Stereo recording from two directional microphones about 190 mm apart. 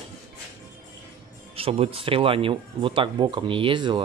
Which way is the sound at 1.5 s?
30° right (ahead or behind).